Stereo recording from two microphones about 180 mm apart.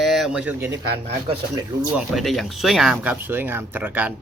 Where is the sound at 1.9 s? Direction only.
Centre (ahead or behind).